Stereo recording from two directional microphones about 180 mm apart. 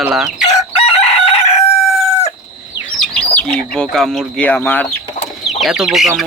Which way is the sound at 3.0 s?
5° left (ahead or behind).